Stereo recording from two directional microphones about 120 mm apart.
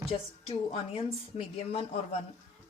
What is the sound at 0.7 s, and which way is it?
Speech, 55° left (ahead or behind).